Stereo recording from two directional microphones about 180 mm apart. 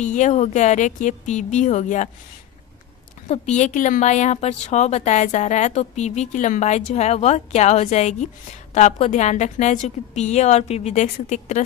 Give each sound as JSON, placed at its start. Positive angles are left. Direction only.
{"t": 0.0, "sound": "a woman's voice", "side_deg": 40}
{"t": 3.3, "sound": "a woman's voice", "side_deg": 40}